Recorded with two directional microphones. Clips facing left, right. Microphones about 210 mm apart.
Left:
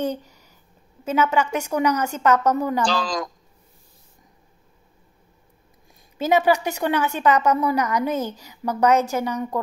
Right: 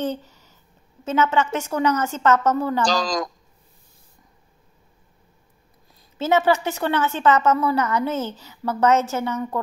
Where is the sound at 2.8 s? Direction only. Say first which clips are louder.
Right 1 dB; 40° right (ahead or behind).